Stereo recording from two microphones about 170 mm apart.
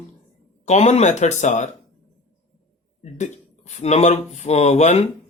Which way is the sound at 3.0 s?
45° left (ahead or behind).